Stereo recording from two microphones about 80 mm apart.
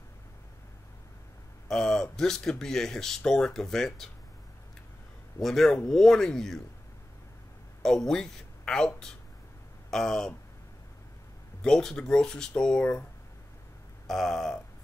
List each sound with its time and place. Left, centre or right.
1.7 s speech: centre
5.4 s speech: centre
7.8 s speech: centre
11.6 s speech: centre
14.0 s speech: centre